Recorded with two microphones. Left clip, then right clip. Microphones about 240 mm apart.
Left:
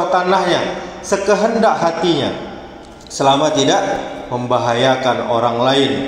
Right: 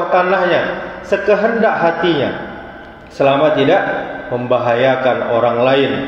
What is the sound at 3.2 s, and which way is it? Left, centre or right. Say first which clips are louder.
Speech: right 1 dB; left.